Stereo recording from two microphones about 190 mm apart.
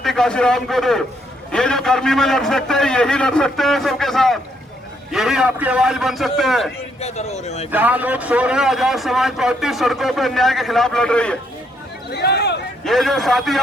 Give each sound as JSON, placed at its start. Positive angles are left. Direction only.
{"t": 0.0, "sound": "a man's voice", "side_deg": 0}
{"t": 7.0, "sound": "a man's voice", "side_deg": 35}
{"t": 7.7, "sound": "a man's voice", "side_deg": -10}
{"t": 12.1, "sound": "speech", "side_deg": 60}
{"t": 12.8, "sound": "a man's voice", "side_deg": 0}